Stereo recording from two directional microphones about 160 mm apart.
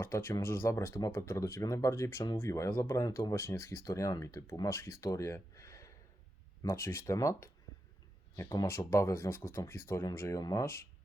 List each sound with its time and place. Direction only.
0.0 s speech: 15° left (ahead or behind)